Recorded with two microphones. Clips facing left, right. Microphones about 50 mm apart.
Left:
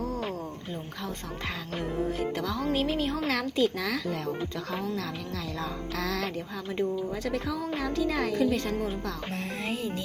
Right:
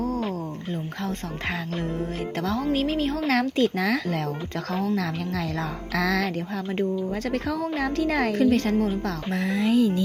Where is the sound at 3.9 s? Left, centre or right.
Right.